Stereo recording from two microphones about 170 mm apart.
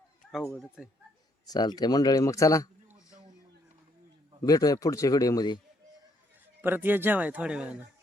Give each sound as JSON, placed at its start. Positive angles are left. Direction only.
{"t": 0.8, "sound": "speech", "side_deg": -5}
{"t": 1.5, "sound": "speech", "side_deg": 25}
{"t": 4.4, "sound": "speech", "side_deg": 20}
{"t": 6.6, "sound": "a man's voice", "side_deg": -10}